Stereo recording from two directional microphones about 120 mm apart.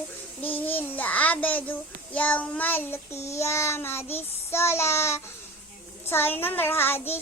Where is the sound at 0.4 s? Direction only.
15° left (ahead or behind).